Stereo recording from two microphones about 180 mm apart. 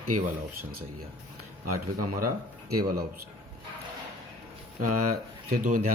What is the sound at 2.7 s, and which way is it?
Speech, 55° right (ahead or behind).